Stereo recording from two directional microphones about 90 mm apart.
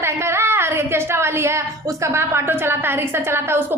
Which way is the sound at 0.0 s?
30° right (ahead or behind).